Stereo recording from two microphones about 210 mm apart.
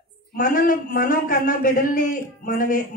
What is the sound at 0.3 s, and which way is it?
A woman's voice, 40° left (ahead or behind).